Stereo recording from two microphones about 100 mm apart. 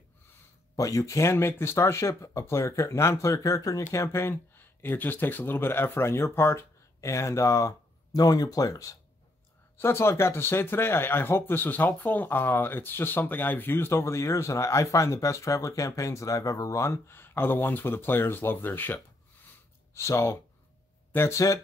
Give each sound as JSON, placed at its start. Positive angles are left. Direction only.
{"t": 0.7, "sound": "speech", "side_deg": 35}